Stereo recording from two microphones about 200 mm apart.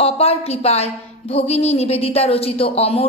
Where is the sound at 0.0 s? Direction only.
30° left (ahead or behind).